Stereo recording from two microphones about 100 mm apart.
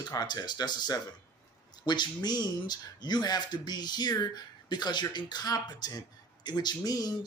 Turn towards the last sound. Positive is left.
turn(degrees=40)  # may be behind; listen again after turning